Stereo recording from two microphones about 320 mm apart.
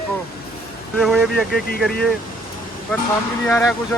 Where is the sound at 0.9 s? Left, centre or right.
Centre.